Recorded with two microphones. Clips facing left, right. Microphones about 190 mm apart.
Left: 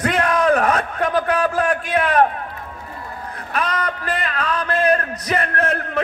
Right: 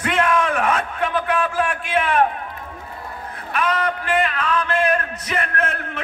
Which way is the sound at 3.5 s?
40° left (ahead or behind).